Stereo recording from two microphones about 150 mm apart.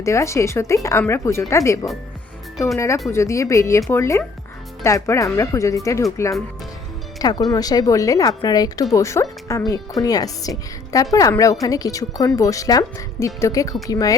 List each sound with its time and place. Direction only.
0.0 s speech: 20° left (ahead or behind)